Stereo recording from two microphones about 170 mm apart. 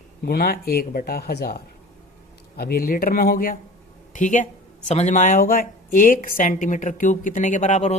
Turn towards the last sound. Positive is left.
turn(degrees=40)  # may be behind; listen again after turning